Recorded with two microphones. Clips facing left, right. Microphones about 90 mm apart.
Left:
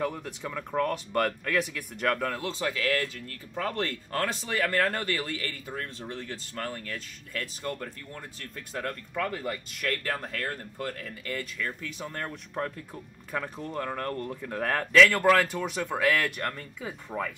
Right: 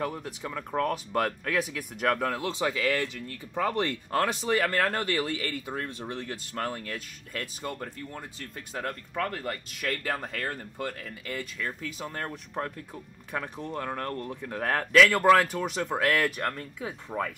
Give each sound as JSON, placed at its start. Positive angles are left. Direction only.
{"t": 0.0, "sound": "speech", "side_deg": -5}
{"t": 2.5, "sound": "speech", "side_deg": -15}